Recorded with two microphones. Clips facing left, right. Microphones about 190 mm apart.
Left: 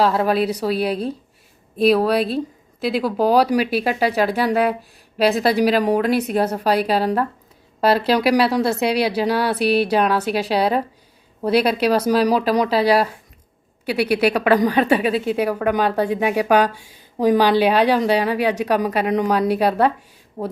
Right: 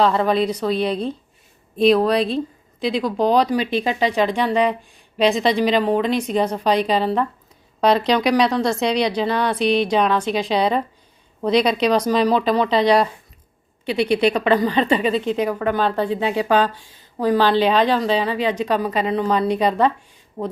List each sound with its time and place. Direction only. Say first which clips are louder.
0.0 s a woman's voice: even; 5° left (ahead or behind)